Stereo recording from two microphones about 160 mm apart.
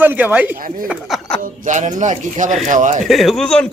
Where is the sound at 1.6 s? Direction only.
50° right (ahead or behind).